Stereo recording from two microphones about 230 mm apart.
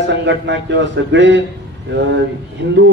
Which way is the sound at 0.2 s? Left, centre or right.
Right.